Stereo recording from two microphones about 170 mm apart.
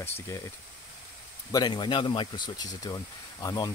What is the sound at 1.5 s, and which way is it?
Speech, 25° left (ahead or behind).